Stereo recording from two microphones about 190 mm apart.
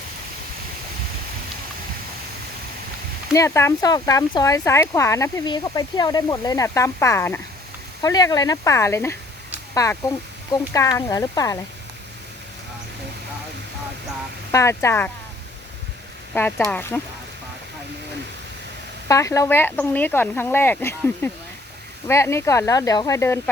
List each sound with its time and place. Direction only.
3.3 s speech: 15° left (ahead or behind)
14.5 s speech: 15° left (ahead or behind)
16.3 s speech: 10° left (ahead or behind)
19.0 s speech: 15° left (ahead or behind)